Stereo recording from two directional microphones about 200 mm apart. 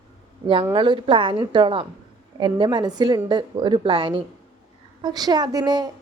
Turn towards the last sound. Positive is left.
turn(degrees=-20)  # may be behind; listen again after turning